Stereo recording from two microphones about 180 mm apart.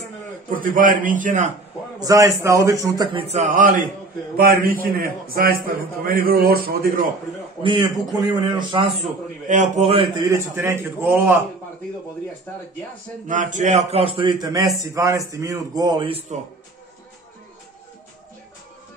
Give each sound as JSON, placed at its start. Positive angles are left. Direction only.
{"t": 0.5, "sound": "a man's voice", "side_deg": -50}
{"t": 2.0, "sound": "a man's voice", "side_deg": -20}
{"t": 7.6, "sound": "a man's voice", "side_deg": -25}
{"t": 9.5, "sound": "a man's voice", "side_deg": -40}
{"t": 10.3, "sound": "a man's voice", "side_deg": -15}
{"t": 13.3, "sound": "a man's voice", "side_deg": -45}